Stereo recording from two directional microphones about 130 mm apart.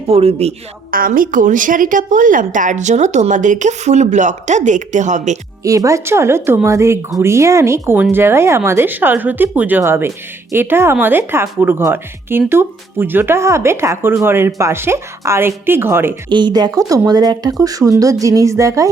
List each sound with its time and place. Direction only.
0.1 s a man's voice: 50° right (ahead or behind)
0.9 s a woman's voice: 90° right; by 5.4 s 65° right (ahead or behind)
5.6 s speech: 25° right (ahead or behind)
16.3 s speech: 35° right (ahead or behind)